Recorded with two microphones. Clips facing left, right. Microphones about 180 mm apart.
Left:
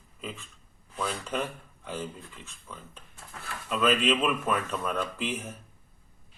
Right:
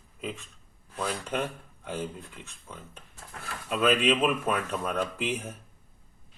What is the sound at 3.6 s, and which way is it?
Speech, 10° right (ahead or behind).